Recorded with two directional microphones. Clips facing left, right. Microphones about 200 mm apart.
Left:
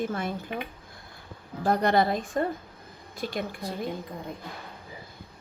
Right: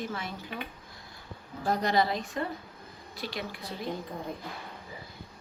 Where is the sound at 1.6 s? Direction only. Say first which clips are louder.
Left 4 dB; 60° left (ahead or behind).